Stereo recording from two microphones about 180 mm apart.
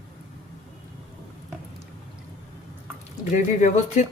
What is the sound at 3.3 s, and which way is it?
Speech, 45° left (ahead or behind).